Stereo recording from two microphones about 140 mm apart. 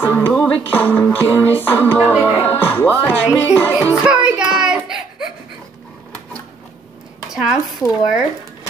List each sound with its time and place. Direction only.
0.0 s music: 15° left (ahead or behind)
4.0 s child singing: 5° right (ahead or behind)
7.2 s speech: 5° right (ahead or behind)